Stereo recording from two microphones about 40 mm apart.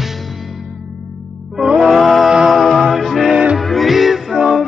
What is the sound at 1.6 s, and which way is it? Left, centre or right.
Music, centre.